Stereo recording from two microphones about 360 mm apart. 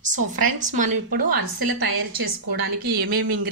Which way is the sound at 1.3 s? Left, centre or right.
Right.